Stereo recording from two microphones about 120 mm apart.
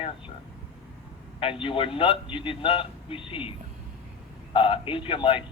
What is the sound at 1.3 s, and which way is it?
A man's voice, 50° left (ahead or behind).